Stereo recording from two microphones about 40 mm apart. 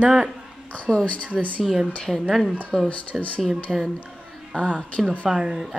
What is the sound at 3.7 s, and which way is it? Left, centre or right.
Speech, centre.